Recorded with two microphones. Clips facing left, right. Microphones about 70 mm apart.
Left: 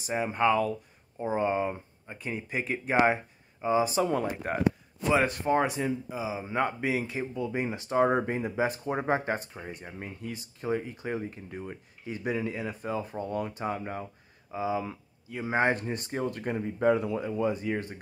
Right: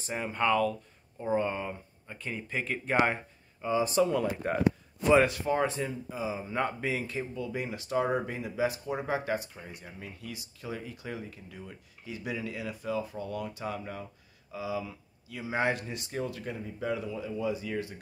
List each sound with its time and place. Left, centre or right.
0.0 s speech: centre
4.0 s speech: left
5.7 s speech: centre; by 17.3 s left
17.3 s speech: left